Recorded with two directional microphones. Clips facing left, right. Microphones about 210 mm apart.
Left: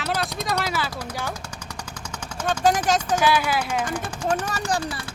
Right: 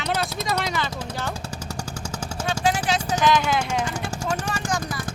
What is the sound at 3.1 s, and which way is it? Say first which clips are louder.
Speech: right 4 dB; 10° left (ahead or behind).